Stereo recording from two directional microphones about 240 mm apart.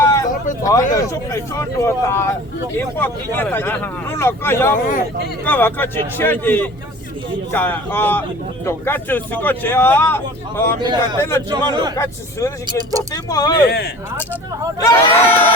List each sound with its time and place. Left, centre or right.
0.0 s vehicle: centre
0.6 s speech: centre
4.7 s speech: left
5.5 s speech: centre
10.8 s a man's voice: centre
11.2 s speech: centre
11.7 s a man's voice: centre
11.9 s speech: centre
13.7 s speech: left
14.8 s speech: centre